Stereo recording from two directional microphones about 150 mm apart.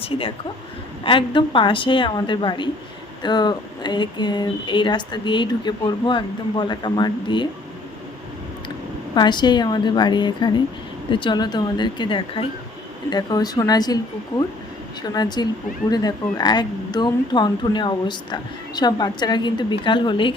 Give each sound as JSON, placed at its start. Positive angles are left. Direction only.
{"t": 0.0, "sound": "a woman's voice", "side_deg": 35}
{"t": 9.1, "sound": "a woman's voice", "side_deg": 30}